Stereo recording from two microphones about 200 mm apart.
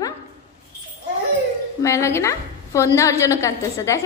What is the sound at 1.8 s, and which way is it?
A woman's voice, 15° left (ahead or behind).